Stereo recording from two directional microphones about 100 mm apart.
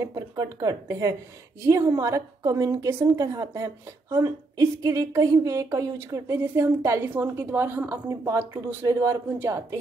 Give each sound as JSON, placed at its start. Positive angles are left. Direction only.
{"t": 0.0, "sound": "a woman's voice", "side_deg": -40}